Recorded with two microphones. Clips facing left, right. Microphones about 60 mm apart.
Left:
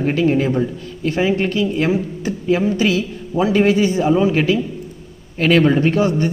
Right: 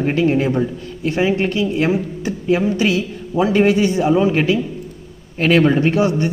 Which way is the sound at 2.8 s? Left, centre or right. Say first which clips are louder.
Even; right.